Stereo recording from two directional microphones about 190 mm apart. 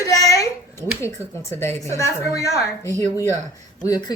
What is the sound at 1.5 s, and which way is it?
A woman's voice, 15° left (ahead or behind).